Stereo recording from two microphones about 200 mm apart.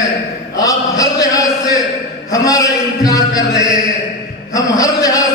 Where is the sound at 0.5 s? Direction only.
15° left (ahead or behind).